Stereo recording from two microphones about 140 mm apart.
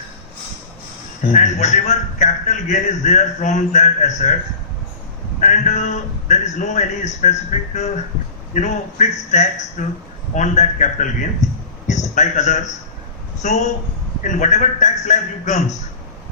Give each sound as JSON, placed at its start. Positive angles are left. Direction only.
{"t": 1.3, "sound": "a man's voice", "side_deg": 60}
{"t": 5.5, "sound": "a man's voice", "side_deg": 55}